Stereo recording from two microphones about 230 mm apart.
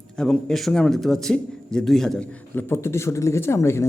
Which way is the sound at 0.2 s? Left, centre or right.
Centre.